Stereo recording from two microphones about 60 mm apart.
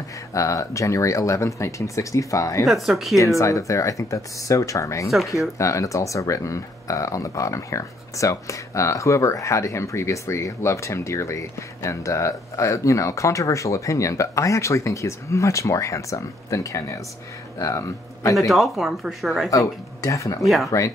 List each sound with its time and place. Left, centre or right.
0.3 s speech: left
2.6 s speech: centre
3.2 s speech: left
18.5 s speech: centre
19.5 s speech: left
20.4 s speech: centre